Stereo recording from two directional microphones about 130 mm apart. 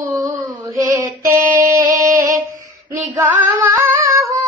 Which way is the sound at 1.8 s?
90° right.